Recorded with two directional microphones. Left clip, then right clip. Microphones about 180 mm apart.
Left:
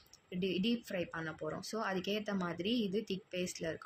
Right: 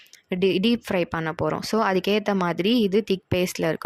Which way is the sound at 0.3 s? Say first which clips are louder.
Right 15 dB; 70° right (ahead or behind).